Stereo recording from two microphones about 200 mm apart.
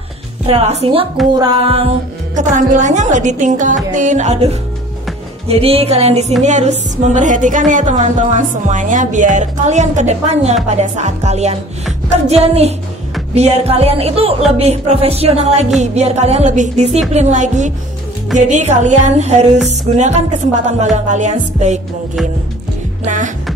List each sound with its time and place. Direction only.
0.5 s a woman's voice: 30° right (ahead or behind)
2.3 s speech: 40° right (ahead or behind)
5.6 s speech: 30° right (ahead or behind)
23.0 s music: 40° right (ahead or behind)